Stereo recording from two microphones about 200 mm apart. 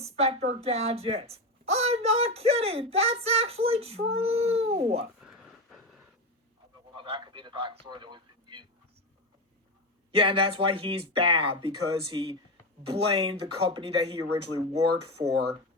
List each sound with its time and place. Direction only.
0.0 s speech: 30° right (ahead or behind)
6.9 s a sound: 25° right (ahead or behind)
10.2 s speech: 25° right (ahead or behind)
15.3 s speech: 55° right (ahead or behind)